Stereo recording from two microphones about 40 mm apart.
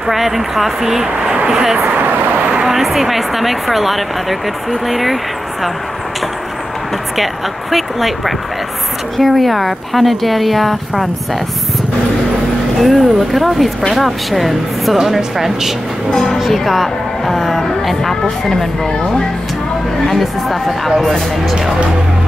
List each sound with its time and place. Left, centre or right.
0.0 s speech: centre
1.1 s vehicle: right
1.5 s speech: centre
2.0 s vehicle: right
2.7 s speech: centre
7.7 s speech: centre
12.8 s speech: centre
16.1 s speech: centre
16.3 s music: centre
18.4 s speech: centre
20.1 s speech: centre